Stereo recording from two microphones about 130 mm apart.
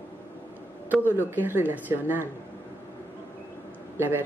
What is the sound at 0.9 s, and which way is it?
Speech, 15° right (ahead or behind).